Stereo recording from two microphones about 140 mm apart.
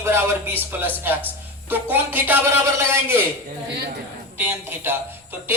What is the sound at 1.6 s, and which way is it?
Speech, 15° right (ahead or behind).